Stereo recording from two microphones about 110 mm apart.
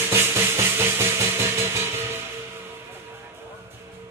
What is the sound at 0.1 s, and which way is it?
Rub, 20° right (ahead or behind).